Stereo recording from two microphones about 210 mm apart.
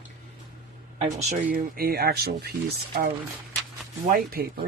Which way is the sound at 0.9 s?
35° right (ahead or behind).